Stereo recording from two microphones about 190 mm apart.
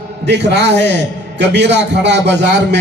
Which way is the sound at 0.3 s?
65° right (ahead or behind).